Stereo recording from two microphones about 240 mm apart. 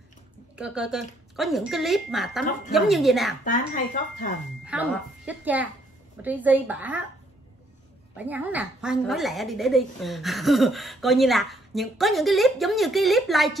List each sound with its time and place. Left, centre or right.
0.6 s a woman's voice: centre
3.4 s speech: left
4.6 s a child's voice: centre
8.2 s a woman's voice: centre